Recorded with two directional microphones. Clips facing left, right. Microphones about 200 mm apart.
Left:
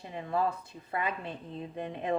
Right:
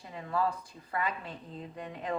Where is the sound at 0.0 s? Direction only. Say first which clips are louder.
Left 1 dB; 25° left (ahead or behind).